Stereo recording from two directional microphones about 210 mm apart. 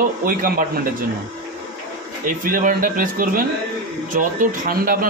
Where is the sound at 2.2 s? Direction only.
40° right (ahead or behind).